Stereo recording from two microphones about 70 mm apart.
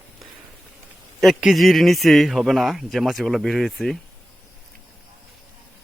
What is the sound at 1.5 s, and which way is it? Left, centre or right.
A man's voice, centre.